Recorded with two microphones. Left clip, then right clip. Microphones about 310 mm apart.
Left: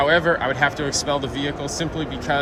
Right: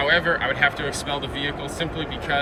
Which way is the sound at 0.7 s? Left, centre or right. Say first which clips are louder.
Left 3 dB; centre.